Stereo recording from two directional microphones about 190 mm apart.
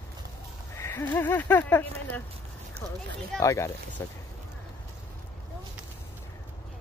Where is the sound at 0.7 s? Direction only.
15° left (ahead or behind).